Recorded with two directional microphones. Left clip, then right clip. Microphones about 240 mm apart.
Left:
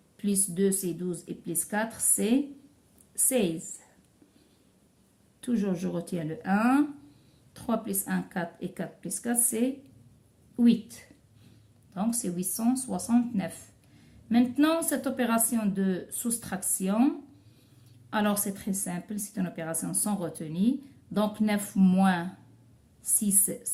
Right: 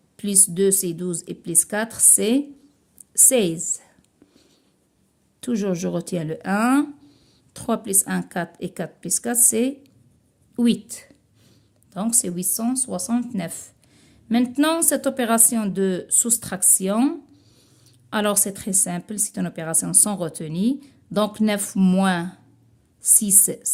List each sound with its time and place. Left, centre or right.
0.2 s speech: right
5.4 s speech: right
23.5 s speech: right